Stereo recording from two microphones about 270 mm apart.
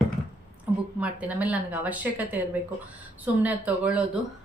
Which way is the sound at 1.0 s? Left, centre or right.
Centre.